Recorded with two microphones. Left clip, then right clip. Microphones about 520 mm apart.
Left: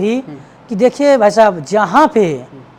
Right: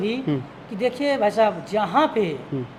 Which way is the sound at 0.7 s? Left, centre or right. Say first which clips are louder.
Left 12 dB; left.